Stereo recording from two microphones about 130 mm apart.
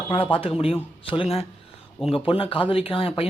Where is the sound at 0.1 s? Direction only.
45° left (ahead or behind).